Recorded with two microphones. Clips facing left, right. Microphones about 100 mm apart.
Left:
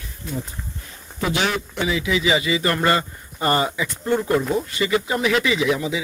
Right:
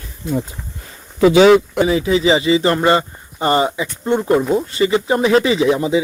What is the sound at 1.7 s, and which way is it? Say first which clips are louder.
Speech: right 7 dB; 35° right (ahead or behind).